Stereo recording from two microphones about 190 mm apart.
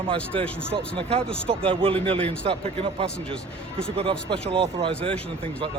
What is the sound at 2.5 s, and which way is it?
A man's voice, 30° right (ahead or behind).